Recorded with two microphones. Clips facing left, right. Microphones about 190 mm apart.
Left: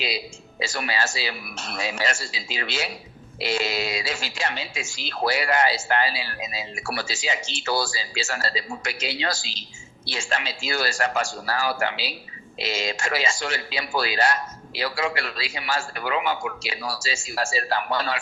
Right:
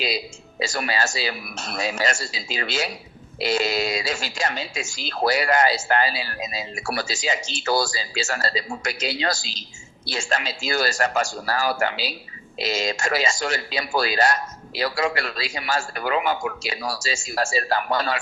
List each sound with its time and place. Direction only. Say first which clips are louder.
0.6 s speech: right 2 dB; 40° right (ahead or behind)